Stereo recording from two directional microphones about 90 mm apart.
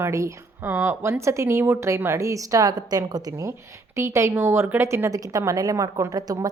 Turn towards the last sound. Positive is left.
turn(degrees=-45)  # may be behind; listen again after turning